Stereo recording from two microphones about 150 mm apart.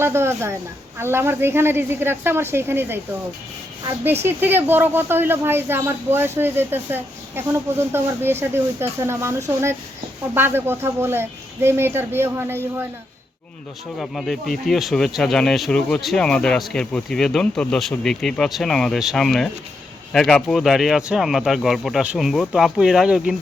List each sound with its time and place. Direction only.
0.0 s speech: 15° right (ahead or behind)
4.0 s speech: 15° right (ahead or behind)
14.0 s speech: centre (ahead or behind)